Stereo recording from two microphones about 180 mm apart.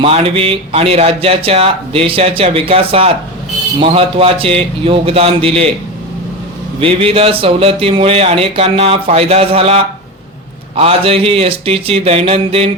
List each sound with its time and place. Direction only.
0.0 s speech: 30° right (ahead or behind)
6.7 s speech: 30° right (ahead or behind)